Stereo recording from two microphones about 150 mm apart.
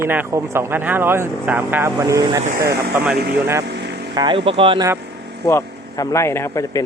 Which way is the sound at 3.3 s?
15° right (ahead or behind).